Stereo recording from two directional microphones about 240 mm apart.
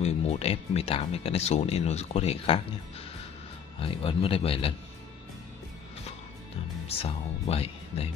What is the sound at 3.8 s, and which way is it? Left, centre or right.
Speech, left.